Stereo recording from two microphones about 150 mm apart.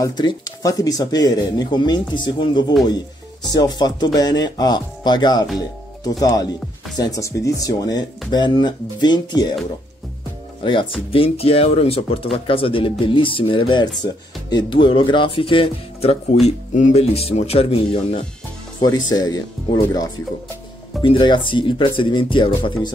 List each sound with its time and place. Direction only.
0.0 s speech: 25° left (ahead or behind)
10.6 s speech: 35° left (ahead or behind)
16.4 s speech: 50° left (ahead or behind)
18.8 s speech: 30° left (ahead or behind)
21.0 s speech: 35° left (ahead or behind)